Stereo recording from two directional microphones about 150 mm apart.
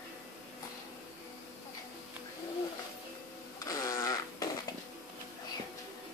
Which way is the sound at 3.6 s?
20° left (ahead or behind).